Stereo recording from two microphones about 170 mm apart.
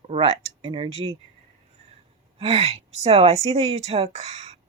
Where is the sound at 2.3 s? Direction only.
35° right (ahead or behind).